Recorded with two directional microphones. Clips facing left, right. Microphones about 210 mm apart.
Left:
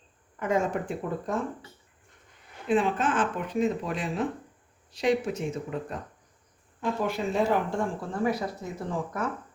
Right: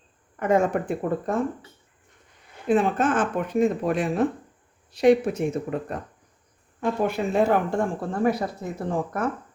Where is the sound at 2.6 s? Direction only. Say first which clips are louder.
Right 4 dB; 45° right (ahead or behind).